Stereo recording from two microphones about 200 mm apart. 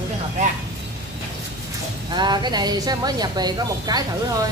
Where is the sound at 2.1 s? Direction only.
20° right (ahead or behind).